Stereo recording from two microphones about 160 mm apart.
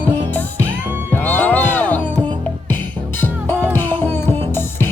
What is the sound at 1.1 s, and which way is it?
Music, 10° left (ahead or behind).